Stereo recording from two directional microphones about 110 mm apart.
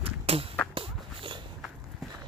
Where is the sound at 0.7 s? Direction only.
50° right (ahead or behind).